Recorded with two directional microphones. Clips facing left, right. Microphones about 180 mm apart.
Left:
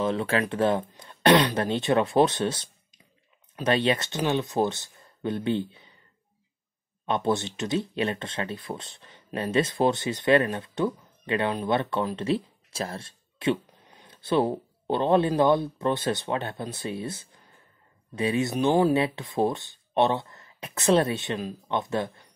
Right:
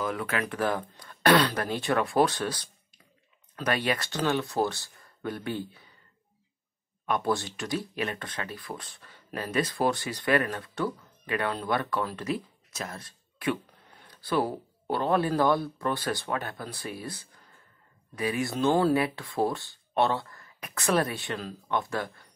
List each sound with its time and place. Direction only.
0.0 s speech: 25° left (ahead or behind)
7.1 s speech: 25° left (ahead or behind)